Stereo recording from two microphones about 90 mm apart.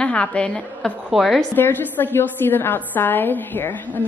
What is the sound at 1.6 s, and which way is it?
A woman's voice, 20° left (ahead or behind).